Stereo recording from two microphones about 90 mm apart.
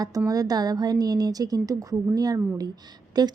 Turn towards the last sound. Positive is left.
turn(degrees=-50)  # may be behind; listen again after turning